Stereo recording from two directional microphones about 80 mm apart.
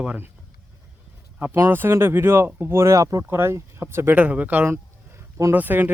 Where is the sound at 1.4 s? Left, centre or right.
Right.